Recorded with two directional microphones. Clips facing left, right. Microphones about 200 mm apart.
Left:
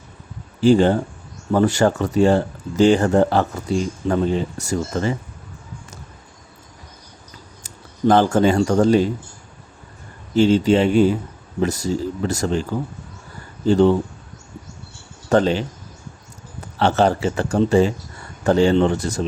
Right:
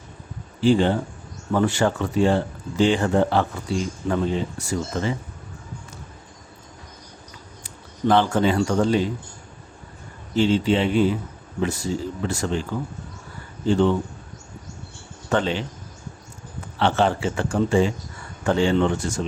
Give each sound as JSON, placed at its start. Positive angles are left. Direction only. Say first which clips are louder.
{"t": 0.6, "sound": "speech", "louder": "left 4 dB", "side_deg": 45}
{"t": 7.6, "sound": "speech", "louder": "left 5 dB", "side_deg": 45}
{"t": 10.3, "sound": "speech", "louder": "left 5 dB", "side_deg": 40}
{"t": 13.7, "sound": "speech", "louder": "left 4 dB", "side_deg": 40}
{"t": 15.3, "sound": "speech", "louder": "left 6 dB", "side_deg": 40}
{"t": 16.7, "sound": "speech", "louder": "left 3 dB", "side_deg": 40}